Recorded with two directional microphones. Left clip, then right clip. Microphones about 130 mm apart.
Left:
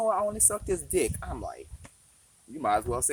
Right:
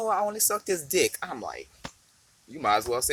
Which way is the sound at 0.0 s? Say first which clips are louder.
Even; 5° left (ahead or behind).